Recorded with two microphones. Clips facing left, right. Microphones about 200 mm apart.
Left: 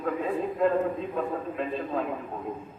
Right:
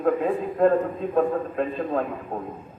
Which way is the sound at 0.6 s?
50° right (ahead or behind).